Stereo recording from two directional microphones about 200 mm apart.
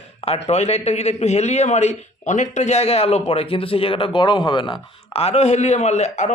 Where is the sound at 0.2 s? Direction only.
30° left (ahead or behind).